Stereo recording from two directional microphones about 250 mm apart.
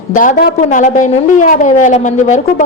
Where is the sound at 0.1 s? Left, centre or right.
Left.